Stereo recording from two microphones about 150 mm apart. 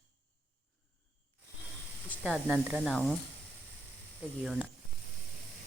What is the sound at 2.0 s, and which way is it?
Speech, 5° right (ahead or behind).